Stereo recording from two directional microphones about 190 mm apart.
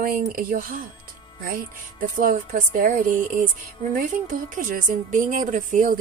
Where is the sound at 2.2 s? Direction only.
45° right (ahead or behind).